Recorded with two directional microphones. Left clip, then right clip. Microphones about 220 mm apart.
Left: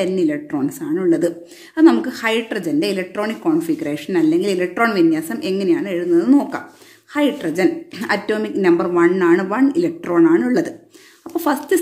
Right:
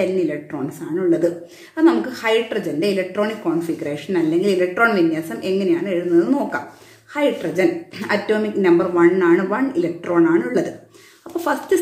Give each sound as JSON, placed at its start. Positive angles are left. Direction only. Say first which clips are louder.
{"t": 0.0, "sound": "a woman's voice", "louder": "left 1 dB", "side_deg": 50}